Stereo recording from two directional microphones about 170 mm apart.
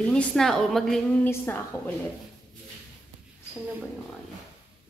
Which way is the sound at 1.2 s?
15° left (ahead or behind).